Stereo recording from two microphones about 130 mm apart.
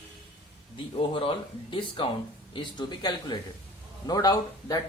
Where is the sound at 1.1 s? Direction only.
40° left (ahead or behind).